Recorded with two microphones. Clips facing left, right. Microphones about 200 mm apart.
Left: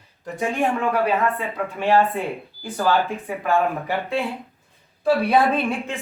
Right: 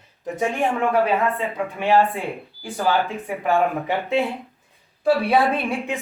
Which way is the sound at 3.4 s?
15° right (ahead or behind).